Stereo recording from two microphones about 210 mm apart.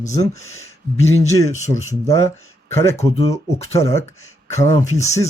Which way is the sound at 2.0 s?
15° left (ahead or behind).